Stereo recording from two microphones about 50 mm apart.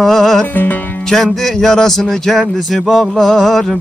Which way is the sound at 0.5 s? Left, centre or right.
Left.